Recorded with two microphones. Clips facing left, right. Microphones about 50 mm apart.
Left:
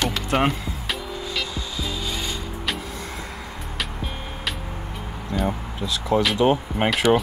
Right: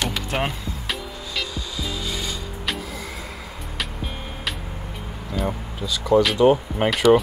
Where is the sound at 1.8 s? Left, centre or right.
Left.